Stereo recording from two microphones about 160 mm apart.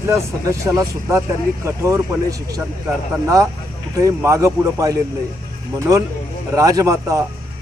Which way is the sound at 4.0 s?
20° right (ahead or behind).